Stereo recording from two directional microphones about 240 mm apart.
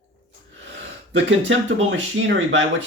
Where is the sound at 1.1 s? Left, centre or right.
Right.